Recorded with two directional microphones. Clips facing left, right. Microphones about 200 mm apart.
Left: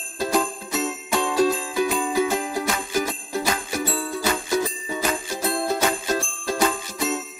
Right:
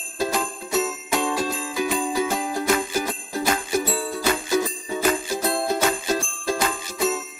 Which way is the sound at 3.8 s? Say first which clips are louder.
Right 1 dB; centre (ahead or behind).